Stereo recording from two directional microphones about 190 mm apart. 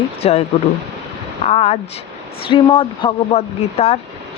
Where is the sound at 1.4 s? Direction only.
35° left (ahead or behind).